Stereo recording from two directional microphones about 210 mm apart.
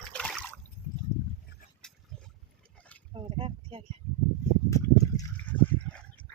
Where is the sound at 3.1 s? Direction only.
25° right (ahead or behind).